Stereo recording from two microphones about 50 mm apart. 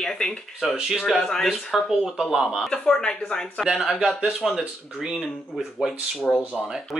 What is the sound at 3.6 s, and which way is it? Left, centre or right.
Speech, centre.